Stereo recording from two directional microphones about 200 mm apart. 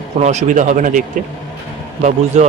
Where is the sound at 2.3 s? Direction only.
35° right (ahead or behind).